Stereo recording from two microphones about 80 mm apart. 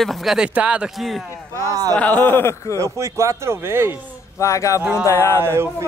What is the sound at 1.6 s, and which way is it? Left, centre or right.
Speech, right.